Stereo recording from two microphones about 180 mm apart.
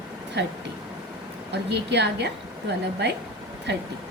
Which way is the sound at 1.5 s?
70° right (ahead or behind).